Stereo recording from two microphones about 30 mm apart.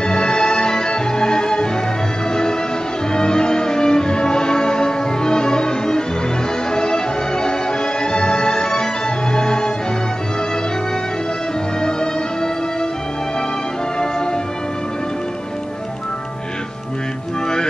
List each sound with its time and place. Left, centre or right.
0.0 s music: left
3.1 s music: left